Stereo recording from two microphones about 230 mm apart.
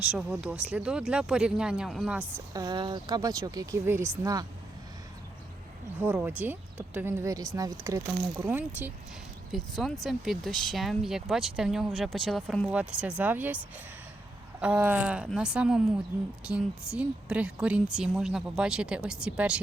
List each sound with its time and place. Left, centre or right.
0.1 s speech: centre
2.5 s speech: centre
6.0 s speech: centre
14.6 s speech: centre